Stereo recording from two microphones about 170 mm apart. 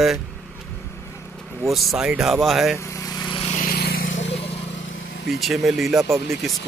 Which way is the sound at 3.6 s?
60° left (ahead or behind).